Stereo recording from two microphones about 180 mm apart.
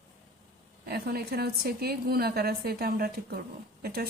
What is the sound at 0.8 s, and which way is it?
A woman's voice, 60° right (ahead or behind).